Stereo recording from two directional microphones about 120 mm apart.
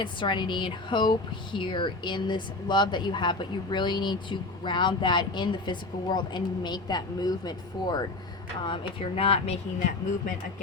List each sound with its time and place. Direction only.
0.0 s a woman's voice: 40° left (ahead or behind)